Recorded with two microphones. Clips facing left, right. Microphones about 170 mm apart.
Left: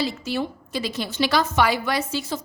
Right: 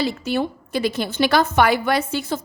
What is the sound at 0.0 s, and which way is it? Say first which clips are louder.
A woman's voice: right 4 dB; 55° right (ahead or behind).